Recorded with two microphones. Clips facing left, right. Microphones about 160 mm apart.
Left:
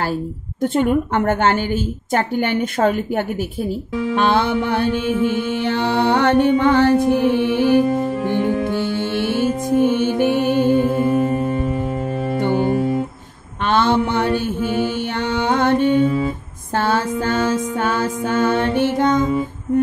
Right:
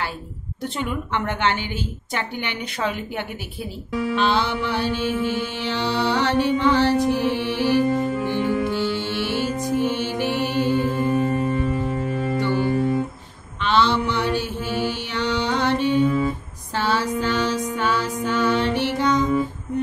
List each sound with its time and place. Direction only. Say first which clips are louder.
0.6 s a woman's voice: left 10 dB; 50° left (ahead or behind)
8.2 s music: left 3 dB; 50° left (ahead or behind)
12.5 s music: left 2 dB; 35° left (ahead or behind)
13.6 s a sound: left 3 dB; 50° left (ahead or behind)
15.1 s music: left 3 dB; 50° left (ahead or behind)